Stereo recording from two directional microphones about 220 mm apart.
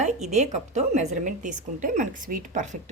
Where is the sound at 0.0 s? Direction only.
30° right (ahead or behind).